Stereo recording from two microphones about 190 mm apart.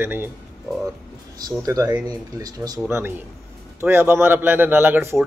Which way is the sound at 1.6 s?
20° right (ahead or behind).